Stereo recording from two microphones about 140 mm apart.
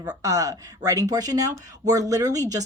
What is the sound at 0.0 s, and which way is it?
Speech, 25° right (ahead or behind).